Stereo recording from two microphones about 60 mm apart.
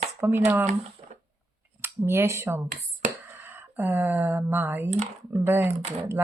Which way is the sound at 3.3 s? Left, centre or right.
Right.